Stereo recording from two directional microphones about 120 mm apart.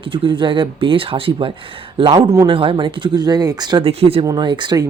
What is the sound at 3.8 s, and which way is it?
Speech, 55° right (ahead or behind).